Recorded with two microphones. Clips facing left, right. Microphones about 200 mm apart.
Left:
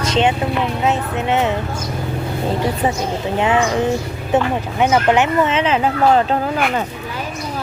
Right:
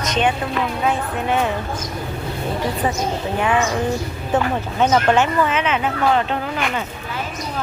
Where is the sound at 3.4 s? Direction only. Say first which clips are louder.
Left 3 dB; 20° left (ahead or behind); by 6.4 s 35° left (ahead or behind).